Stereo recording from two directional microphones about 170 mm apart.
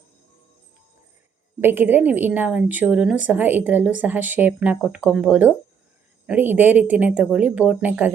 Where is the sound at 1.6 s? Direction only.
10° right (ahead or behind).